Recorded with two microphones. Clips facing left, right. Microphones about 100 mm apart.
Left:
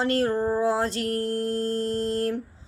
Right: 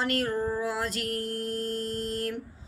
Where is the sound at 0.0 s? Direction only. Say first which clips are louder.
Left 5 dB; 30° left (ahead or behind).